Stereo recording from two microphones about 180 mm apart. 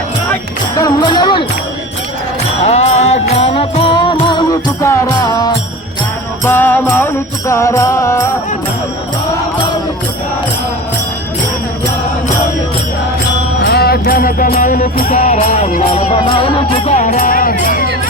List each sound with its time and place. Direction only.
0.8 s speech: 25° left (ahead or behind)
2.6 s music: 35° left (ahead or behind); by 5.5 s 20° left (ahead or behind)
6.4 s music: 10° left (ahead or behind)
13.6 s music: 65° left (ahead or behind); by 15.1 s 50° left (ahead or behind)
15.1 s music: 40° left (ahead or behind)